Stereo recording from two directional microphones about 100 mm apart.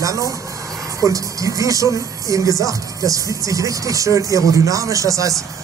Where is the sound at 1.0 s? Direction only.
35° right (ahead or behind).